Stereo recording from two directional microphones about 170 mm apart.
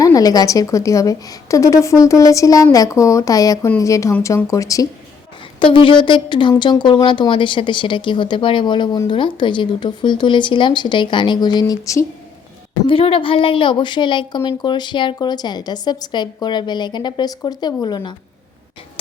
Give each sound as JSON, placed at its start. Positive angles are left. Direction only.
{"t": 0.0, "sound": "a woman's voice", "side_deg": 20}
{"t": 12.9, "sound": "a woman's voice", "side_deg": 30}